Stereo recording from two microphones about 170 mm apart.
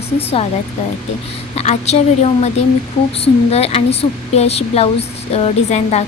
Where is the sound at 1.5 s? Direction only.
40° left (ahead or behind).